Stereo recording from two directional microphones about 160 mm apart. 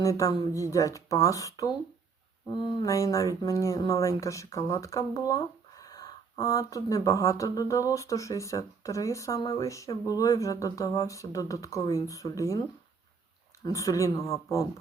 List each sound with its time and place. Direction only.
0.0 s speech: 20° left (ahead or behind)
13.7 s speech: 20° left (ahead or behind)